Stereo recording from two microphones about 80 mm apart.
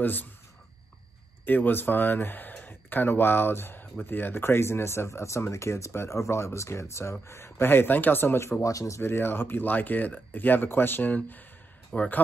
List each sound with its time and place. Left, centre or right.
0.0 s speech: left
1.4 s speech: left
9.0 s speech: left